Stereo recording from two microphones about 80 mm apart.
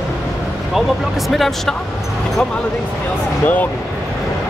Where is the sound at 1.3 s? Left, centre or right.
Centre.